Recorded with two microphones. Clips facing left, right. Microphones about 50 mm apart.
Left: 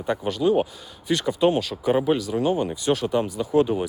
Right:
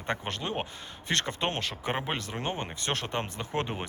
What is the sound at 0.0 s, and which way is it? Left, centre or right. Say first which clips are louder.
Speech: left 10 dB; right.